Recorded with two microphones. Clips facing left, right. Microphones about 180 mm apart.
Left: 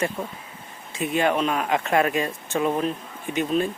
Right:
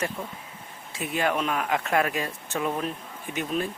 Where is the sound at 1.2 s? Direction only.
20° left (ahead or behind).